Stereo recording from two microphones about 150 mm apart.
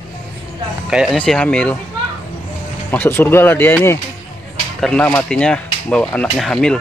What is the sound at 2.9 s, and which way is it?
Speech, 15° left (ahead or behind).